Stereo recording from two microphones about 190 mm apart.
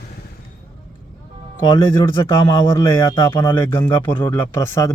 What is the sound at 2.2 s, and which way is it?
A man's voice, 20° left (ahead or behind).